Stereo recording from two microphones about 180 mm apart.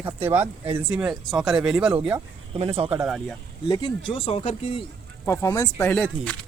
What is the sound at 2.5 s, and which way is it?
Speech, 30° right (ahead or behind).